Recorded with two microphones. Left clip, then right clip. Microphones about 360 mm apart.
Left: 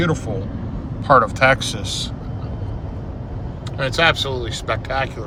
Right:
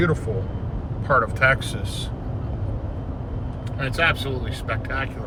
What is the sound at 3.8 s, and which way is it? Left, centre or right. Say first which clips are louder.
Speech: left 5 dB; centre.